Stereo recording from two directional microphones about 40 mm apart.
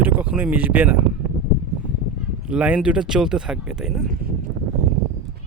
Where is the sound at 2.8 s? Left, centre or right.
Right.